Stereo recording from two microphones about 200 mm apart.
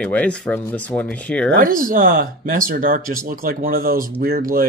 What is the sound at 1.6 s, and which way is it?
Speech, 45° right (ahead or behind).